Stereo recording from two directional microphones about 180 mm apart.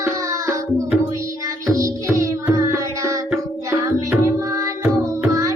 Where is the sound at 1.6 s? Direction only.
15° right (ahead or behind).